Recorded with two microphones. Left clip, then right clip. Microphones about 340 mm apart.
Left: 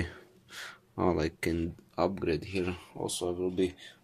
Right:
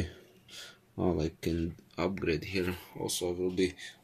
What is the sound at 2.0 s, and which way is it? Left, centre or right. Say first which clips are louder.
Speech: left 2 dB; centre.